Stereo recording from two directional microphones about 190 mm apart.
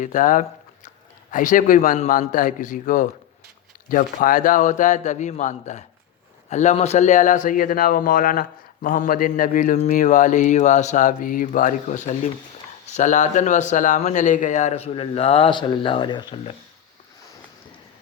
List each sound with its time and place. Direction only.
0.0 s a man's voice: 45° left (ahead or behind)